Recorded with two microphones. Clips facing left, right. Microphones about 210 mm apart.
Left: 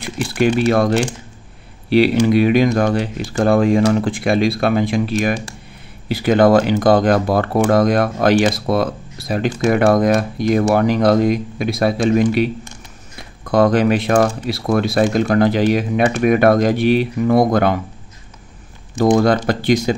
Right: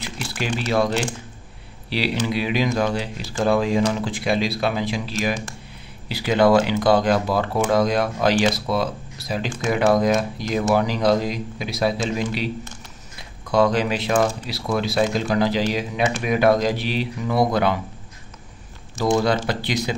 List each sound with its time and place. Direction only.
0.0 s speech: 55° left (ahead or behind)
13.5 s speech: 55° left (ahead or behind)
19.1 s speech: 50° left (ahead or behind)